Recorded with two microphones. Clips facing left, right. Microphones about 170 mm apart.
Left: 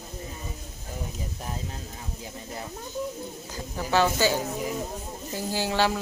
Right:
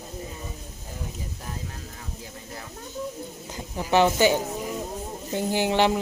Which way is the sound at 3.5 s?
20° right (ahead or behind).